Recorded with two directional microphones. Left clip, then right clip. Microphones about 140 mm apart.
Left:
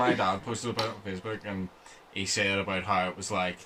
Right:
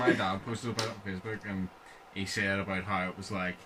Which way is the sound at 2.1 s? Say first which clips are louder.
Left 4 dB; 15° left (ahead or behind).